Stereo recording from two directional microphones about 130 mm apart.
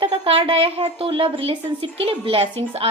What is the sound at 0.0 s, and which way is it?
A woman's voice, 45° right (ahead or behind).